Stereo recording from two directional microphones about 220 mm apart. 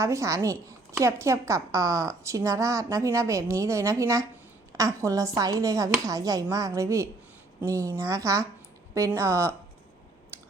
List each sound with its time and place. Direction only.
0.0 s a woman's voice: 15° right (ahead or behind)
10.3 s clicking: 10° right (ahead or behind)